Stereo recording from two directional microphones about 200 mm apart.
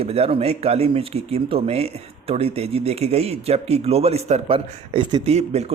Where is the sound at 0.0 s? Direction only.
30° right (ahead or behind).